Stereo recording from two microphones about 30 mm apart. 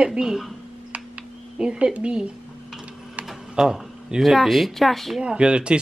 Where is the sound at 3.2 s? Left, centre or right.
Right.